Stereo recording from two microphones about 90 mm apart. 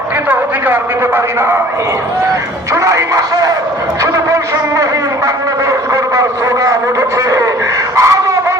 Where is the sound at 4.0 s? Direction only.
35° right (ahead or behind).